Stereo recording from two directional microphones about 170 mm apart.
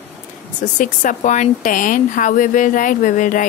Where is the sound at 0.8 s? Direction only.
50° left (ahead or behind).